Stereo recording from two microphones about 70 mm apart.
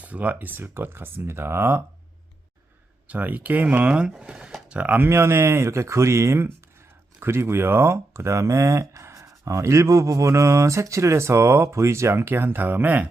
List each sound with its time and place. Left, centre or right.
0.0 s speech: right
3.1 s speech: right
5.0 s speech: right